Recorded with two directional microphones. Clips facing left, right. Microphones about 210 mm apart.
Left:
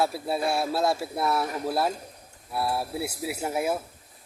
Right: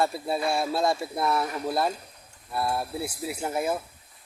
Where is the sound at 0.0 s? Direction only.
5° left (ahead or behind).